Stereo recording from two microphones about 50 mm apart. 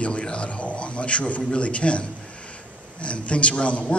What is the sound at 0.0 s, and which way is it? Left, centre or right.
A man's voice, left.